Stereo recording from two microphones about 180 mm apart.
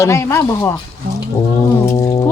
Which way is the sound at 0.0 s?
15° left (ahead or behind).